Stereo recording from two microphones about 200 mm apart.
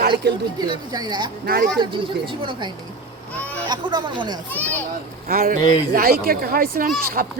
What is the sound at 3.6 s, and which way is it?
Speech, 20° right (ahead or behind).